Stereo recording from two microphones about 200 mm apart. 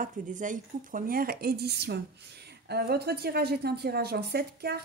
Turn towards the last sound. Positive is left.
turn(degrees=-50)  # may be behind; listen again after turning